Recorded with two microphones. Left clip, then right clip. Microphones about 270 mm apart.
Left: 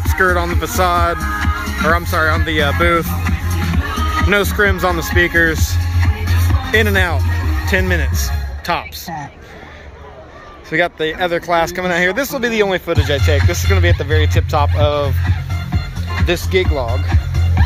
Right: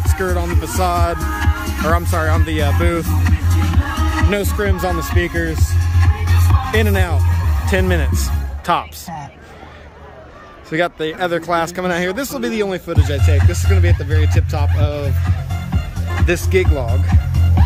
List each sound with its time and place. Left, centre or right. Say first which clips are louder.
0.2 s speech: left 7 dB; centre
3.3 s music: left 1 dB; left
4.3 s speech: left 9 dB; centre
6.7 s speech: left 5 dB; centre
10.7 s speech: left 2 dB; centre
16.3 s speech: even; centre